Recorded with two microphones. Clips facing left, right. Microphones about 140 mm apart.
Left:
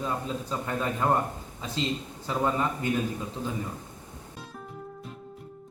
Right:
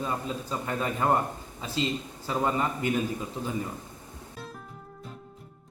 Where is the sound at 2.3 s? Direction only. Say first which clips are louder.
Even; 10° right (ahead or behind).